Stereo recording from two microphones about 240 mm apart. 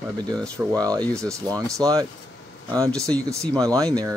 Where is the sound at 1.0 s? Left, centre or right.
Centre.